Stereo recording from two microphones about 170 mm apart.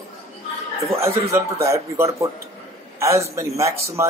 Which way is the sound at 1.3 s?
15° right (ahead or behind).